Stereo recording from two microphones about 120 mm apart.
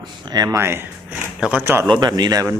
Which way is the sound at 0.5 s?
20° right (ahead or behind).